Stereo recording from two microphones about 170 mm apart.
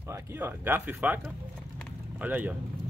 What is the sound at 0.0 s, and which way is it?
Speech, 15° right (ahead or behind).